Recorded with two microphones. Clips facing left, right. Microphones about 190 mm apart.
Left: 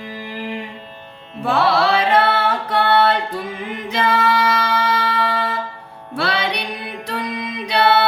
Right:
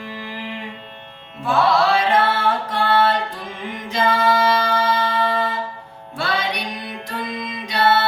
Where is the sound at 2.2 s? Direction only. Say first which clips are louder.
Left 1 dB; 65° left (ahead or behind).